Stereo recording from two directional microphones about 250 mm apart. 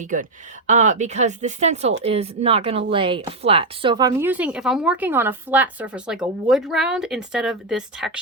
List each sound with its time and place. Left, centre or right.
0.0 s speech: right; by 8.2 s centre